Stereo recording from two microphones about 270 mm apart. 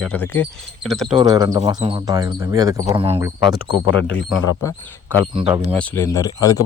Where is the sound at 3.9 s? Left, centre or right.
Left.